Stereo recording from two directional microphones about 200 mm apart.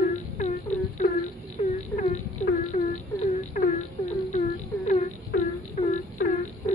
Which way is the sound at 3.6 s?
45° left (ahead or behind).